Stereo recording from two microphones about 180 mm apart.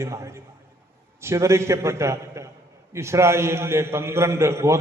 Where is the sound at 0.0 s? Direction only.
15° right (ahead or behind).